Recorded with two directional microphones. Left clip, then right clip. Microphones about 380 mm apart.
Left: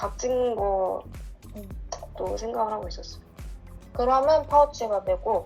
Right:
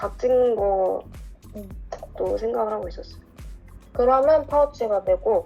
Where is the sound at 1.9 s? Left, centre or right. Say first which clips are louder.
Right 5 dB; centre.